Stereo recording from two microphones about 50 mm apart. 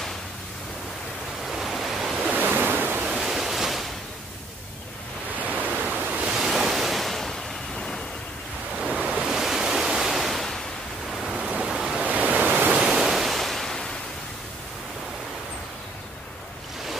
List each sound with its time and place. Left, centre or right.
1.5 s waves: centre
2.3 s waves: right
3.0 s waves: centre
5.4 s ocean: right
6.3 s waves: centre
8.7 s waves: centre
9.0 s waves: right
9.3 s waves: centre
11.4 s waves: centre
12.0 s waves: right
12.9 s waves: centre